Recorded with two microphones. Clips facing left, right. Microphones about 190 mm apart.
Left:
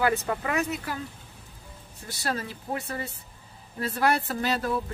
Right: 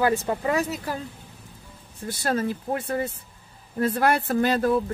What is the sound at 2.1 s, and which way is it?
Speech, 50° right (ahead or behind).